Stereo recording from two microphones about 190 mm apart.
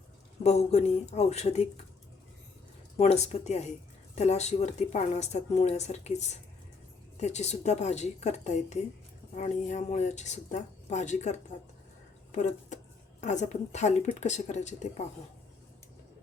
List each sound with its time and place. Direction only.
0.4 s speech: 35° left (ahead or behind)
3.0 s speech: 35° left (ahead or behind)